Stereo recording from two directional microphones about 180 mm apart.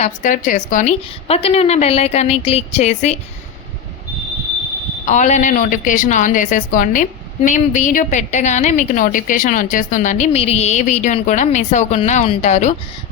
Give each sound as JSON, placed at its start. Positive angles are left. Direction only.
{"t": 0.0, "sound": "a woman's voice", "side_deg": 45}
{"t": 5.0, "sound": "a woman's voice", "side_deg": 40}